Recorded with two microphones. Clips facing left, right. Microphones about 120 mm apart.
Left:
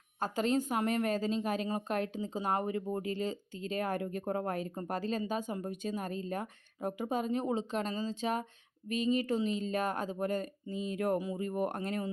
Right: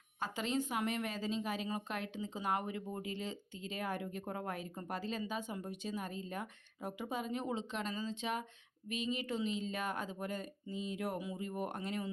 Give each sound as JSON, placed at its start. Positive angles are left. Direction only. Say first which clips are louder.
{"t": 0.2, "sound": "a woman's voice", "louder": "left 6 dB", "side_deg": 45}